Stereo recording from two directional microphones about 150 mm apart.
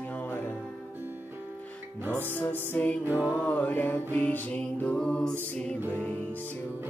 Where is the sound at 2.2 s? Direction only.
10° left (ahead or behind).